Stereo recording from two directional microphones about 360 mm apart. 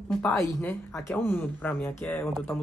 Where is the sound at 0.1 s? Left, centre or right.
Centre.